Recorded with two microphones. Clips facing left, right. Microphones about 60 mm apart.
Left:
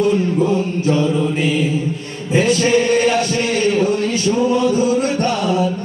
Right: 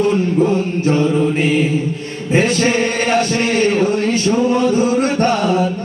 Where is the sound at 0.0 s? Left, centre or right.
Right.